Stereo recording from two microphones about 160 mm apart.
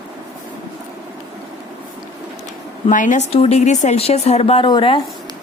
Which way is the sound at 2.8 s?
50° left (ahead or behind).